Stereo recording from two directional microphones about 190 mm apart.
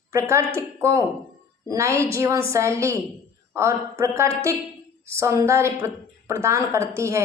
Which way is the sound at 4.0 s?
15° right (ahead or behind).